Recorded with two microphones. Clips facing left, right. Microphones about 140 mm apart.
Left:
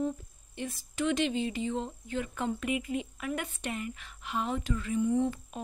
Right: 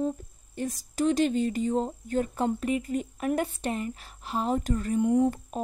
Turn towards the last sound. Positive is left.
turn(degrees=-40)  # may be behind; listen again after turning